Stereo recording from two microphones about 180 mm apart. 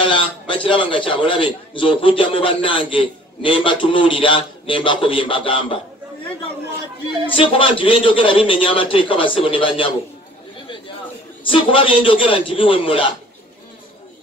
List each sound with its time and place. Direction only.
0.7 s a man's voice: 30° left (ahead or behind)
7.2 s a man's voice: 30° left (ahead or behind)
11.4 s a man's voice: 30° left (ahead or behind)